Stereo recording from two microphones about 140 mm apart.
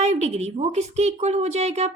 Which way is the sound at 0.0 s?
55° right (ahead or behind).